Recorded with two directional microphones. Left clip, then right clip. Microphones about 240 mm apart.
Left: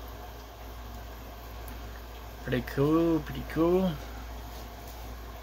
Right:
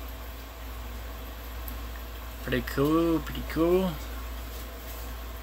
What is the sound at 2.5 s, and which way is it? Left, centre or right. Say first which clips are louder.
Speech: right 1 dB; centre.